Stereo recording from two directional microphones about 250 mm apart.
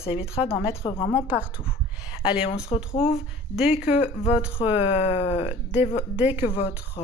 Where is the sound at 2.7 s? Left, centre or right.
Left.